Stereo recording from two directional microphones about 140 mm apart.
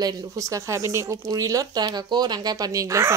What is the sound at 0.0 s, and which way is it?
Speech, 20° right (ahead or behind).